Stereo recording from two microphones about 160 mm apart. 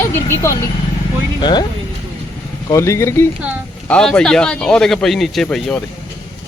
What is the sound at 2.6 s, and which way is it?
Speech, 20° left (ahead or behind).